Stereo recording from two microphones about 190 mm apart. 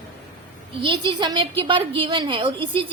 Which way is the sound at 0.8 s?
25° right (ahead or behind).